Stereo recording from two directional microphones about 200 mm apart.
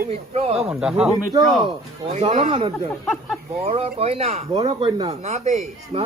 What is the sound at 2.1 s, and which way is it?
Speech, 35° right (ahead or behind).